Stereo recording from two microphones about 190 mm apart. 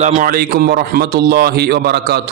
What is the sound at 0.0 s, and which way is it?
A man's voice, 45° right (ahead or behind).